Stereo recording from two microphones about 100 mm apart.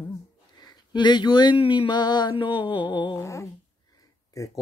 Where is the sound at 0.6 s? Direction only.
45° left (ahead or behind).